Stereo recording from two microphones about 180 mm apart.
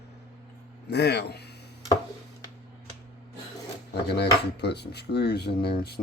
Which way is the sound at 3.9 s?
65° left (ahead or behind).